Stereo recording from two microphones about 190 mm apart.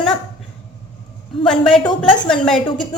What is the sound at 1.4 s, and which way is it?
A woman's voice, 5° left (ahead or behind).